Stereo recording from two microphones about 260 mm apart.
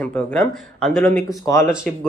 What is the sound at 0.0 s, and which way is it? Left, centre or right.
Speech, centre.